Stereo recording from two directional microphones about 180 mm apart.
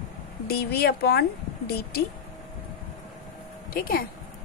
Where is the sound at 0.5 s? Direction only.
60° left (ahead or behind).